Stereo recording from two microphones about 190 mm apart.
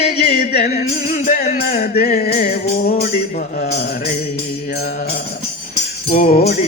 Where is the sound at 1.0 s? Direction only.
40° left (ahead or behind).